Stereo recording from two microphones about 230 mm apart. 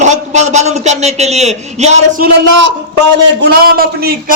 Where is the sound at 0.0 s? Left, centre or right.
Right.